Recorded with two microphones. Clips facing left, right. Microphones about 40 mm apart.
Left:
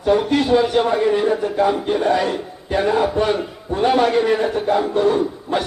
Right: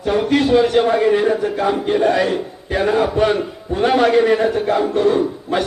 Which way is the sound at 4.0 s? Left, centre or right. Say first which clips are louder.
Right 3 dB; right.